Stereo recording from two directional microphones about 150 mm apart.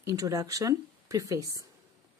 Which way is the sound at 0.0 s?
20° right (ahead or behind).